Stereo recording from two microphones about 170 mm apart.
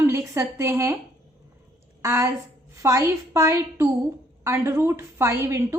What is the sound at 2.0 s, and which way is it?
A woman's voice, 20° right (ahead or behind).